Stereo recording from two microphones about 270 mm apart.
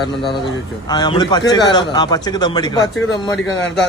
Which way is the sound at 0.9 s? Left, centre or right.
Centre.